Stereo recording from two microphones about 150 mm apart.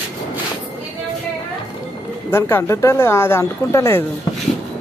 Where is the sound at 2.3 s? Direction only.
15° left (ahead or behind).